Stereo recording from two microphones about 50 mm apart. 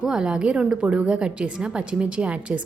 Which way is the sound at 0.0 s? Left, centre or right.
Centre.